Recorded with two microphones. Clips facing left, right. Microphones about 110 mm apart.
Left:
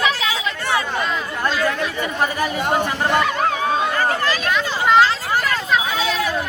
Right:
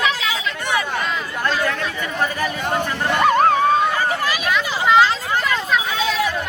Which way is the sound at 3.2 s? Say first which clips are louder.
Right 5 dB; 45° right (ahead or behind).